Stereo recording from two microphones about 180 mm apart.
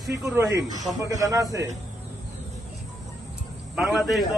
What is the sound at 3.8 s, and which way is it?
Speech, centre (ahead or behind).